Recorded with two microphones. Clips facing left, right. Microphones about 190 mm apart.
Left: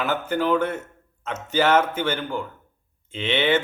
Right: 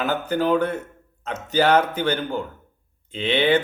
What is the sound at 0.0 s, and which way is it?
Speech, 40° right (ahead or behind).